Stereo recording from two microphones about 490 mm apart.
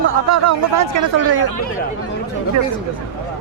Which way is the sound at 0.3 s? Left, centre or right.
Right.